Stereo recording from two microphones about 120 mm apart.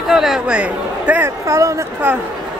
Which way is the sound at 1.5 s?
25° right (ahead or behind).